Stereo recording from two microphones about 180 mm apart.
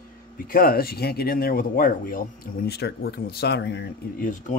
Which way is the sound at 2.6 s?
65° left (ahead or behind).